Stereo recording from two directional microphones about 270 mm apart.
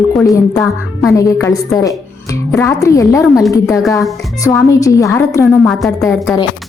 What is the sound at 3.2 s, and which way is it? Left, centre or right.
Speech, centre.